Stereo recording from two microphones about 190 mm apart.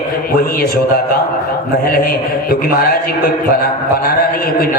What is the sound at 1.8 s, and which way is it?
A man's voice, 50° left (ahead or behind).